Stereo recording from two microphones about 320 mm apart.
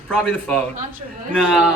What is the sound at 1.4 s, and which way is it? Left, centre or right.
Speech, centre.